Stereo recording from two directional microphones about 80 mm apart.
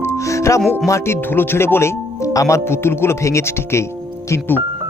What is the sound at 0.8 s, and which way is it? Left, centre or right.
Speech, left.